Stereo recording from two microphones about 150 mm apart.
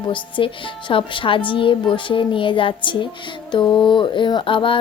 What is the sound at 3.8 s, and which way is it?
Speech, 30° left (ahead or behind).